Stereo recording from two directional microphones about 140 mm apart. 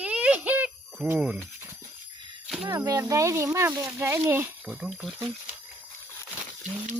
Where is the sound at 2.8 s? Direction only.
25° right (ahead or behind).